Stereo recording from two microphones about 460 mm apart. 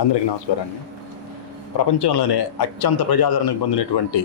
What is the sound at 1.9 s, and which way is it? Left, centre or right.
A man's voice, left.